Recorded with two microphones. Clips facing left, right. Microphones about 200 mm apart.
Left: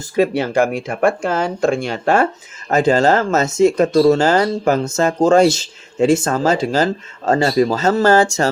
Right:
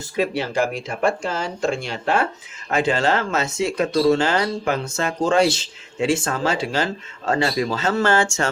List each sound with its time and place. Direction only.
0.2 s speech: 50° left (ahead or behind)